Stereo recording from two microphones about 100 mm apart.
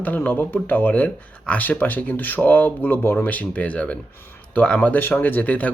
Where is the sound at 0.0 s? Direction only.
15° left (ahead or behind).